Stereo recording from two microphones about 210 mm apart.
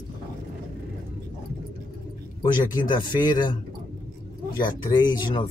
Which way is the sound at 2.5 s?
20° left (ahead or behind).